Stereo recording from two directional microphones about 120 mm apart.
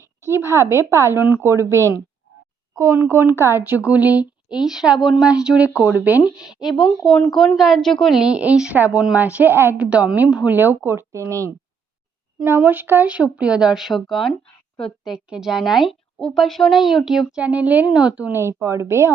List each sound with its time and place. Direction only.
0.2 s a woman's voice: 25° right (ahead or behind)
18.2 s speech: 20° right (ahead or behind)